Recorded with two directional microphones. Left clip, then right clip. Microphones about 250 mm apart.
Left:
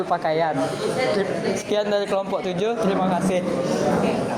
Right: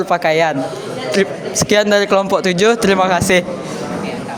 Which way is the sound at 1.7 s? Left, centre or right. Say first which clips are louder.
Right 11 dB; right.